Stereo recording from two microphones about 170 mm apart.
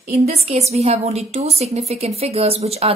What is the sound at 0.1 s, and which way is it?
Speech, 40° right (ahead or behind).